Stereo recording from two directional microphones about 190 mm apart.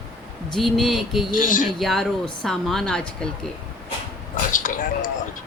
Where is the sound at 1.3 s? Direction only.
45° left (ahead or behind).